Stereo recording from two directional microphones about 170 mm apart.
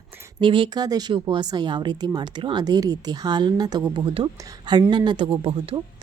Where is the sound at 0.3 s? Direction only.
30° right (ahead or behind).